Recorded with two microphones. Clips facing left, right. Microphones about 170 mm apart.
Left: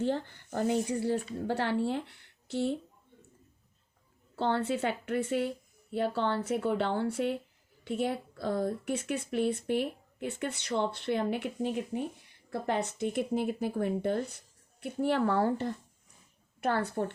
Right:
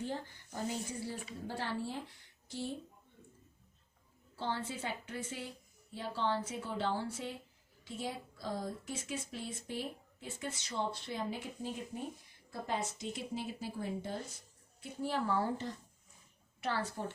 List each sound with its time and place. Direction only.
0.0 s speech: 70° left (ahead or behind)
4.4 s a woman's voice: 65° left (ahead or behind)
16.6 s a woman's voice: 55° left (ahead or behind)